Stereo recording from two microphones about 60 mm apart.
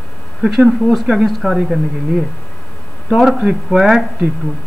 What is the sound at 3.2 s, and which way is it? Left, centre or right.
Speech, centre.